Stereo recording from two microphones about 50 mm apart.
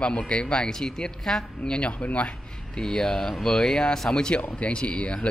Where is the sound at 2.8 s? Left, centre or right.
Centre.